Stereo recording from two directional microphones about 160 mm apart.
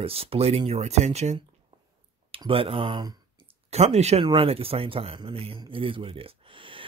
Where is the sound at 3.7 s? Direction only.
45° right (ahead or behind).